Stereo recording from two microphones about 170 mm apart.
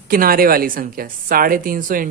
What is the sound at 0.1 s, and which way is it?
Speech, 60° right (ahead or behind).